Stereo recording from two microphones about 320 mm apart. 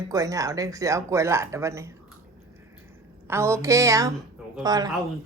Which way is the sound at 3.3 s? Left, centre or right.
Centre.